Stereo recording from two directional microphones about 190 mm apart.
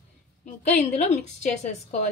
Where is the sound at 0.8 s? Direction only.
35° left (ahead or behind).